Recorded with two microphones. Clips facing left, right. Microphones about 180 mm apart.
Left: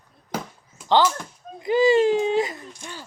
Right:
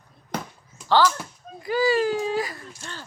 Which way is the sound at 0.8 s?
20° left (ahead or behind).